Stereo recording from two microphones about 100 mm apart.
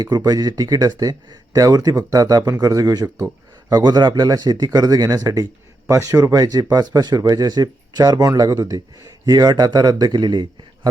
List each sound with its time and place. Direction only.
0.3 s a man's voice: 40° right (ahead or behind)